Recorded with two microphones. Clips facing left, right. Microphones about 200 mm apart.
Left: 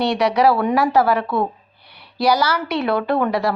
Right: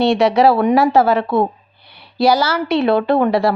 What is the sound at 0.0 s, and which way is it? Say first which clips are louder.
Speech: right 4 dB; 25° right (ahead or behind).